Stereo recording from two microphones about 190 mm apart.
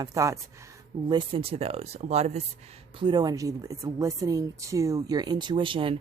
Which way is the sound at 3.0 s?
20° right (ahead or behind).